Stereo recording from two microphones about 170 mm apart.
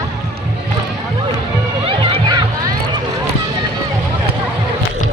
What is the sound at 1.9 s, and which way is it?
Music, 30° right (ahead or behind).